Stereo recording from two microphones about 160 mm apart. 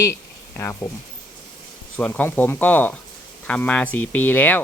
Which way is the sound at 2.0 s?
10° left (ahead or behind).